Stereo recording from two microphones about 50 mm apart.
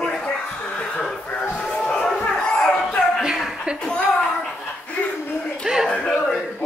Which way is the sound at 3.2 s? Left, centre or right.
Centre.